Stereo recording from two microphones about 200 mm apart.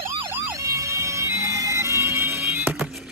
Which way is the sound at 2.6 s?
5° right (ahead or behind).